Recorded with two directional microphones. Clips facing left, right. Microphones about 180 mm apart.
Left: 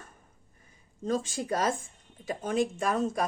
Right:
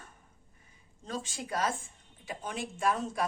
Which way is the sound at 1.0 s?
45° left (ahead or behind).